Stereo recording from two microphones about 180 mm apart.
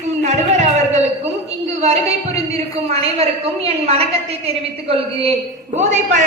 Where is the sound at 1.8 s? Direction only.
35° right (ahead or behind).